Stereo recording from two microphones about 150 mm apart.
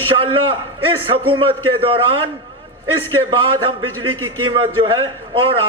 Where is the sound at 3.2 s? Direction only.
35° right (ahead or behind).